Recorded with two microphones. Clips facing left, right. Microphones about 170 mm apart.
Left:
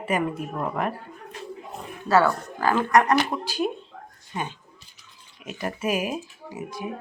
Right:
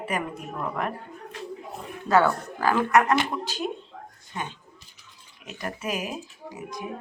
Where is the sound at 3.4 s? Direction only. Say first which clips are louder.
Left 4 dB; 10° left (ahead or behind).